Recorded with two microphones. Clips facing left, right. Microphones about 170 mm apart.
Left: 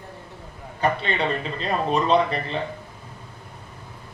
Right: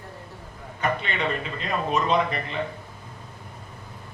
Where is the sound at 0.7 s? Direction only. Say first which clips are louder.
Left 4 dB; 35° left (ahead or behind).